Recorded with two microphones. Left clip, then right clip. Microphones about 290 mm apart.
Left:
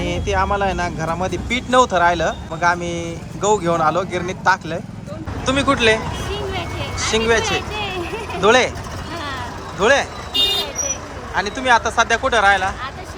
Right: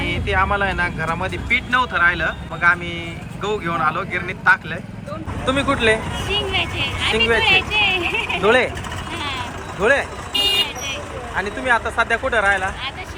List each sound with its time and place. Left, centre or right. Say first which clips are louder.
0.0 s speech: even; centre
6.3 s vehicle: right 8 dB; left
7.1 s speech: right 2 dB; centre
7.7 s a sound: right 7 dB; left
8.4 s speech: left 3 dB; centre
9.8 s speech: left 2 dB; centre
11.3 s speech: left 3 dB; centre